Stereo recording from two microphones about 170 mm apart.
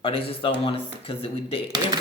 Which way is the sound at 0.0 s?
35° left (ahead or behind).